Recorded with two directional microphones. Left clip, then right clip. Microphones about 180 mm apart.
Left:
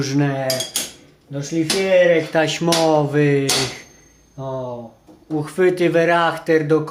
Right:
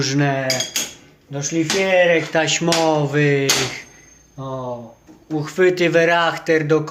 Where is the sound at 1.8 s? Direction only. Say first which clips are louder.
Left 2 dB; 25° left (ahead or behind).